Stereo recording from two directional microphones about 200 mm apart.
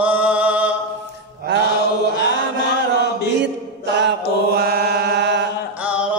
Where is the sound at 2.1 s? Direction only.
55° left (ahead or behind).